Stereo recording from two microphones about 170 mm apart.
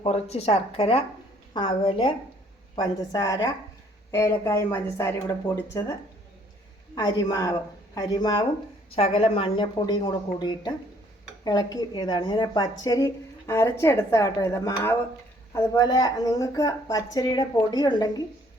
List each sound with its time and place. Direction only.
0.0 s a woman's voice: 40° left (ahead or behind); by 5.9 s 20° left (ahead or behind)
6.9 s a woman's voice: 25° left (ahead or behind)